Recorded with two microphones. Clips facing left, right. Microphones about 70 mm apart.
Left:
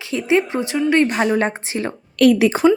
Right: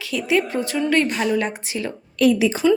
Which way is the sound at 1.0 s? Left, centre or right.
Left.